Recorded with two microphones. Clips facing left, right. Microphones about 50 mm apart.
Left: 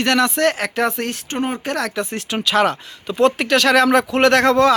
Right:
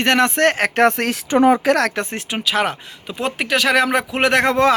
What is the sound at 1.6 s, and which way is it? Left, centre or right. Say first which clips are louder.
Speech: right 6 dB; right.